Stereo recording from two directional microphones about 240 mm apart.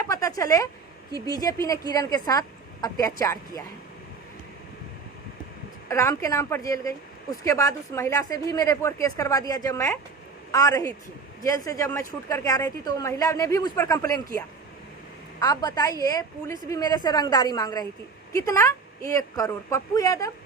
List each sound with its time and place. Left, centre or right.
0.0 s a sound: centre
1.1 s a woman's voice: centre
5.9 s a woman's voice: centre